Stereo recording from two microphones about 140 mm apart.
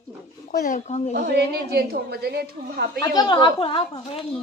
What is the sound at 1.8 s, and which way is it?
Speech, 90° right.